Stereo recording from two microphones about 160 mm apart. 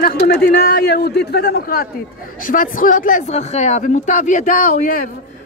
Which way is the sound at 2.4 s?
60° left (ahead or behind).